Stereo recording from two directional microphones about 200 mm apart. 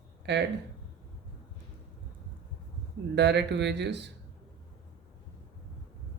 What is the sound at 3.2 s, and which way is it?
Speech, 60° right (ahead or behind).